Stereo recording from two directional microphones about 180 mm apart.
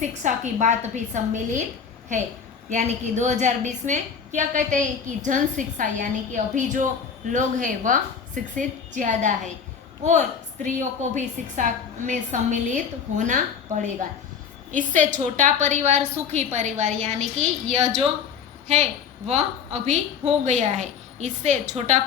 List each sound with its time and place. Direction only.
0.0 s a woman's voice: 40° right (ahead or behind)
2.6 s a woman's voice: 40° right (ahead or behind)
14.9 s a woman's voice: 45° right (ahead or behind)
19.3 s a woman's voice: 40° right (ahead or behind)